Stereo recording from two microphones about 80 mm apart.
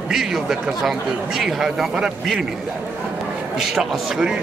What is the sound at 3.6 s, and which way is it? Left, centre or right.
Speech, centre.